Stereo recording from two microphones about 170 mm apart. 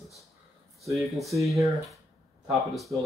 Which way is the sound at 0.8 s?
Centre (ahead or behind).